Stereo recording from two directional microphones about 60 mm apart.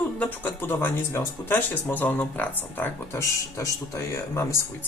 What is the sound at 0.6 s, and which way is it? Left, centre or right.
Speech, left.